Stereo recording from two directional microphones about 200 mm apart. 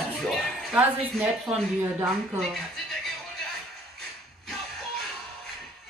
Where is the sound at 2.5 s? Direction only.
Centre (ahead or behind).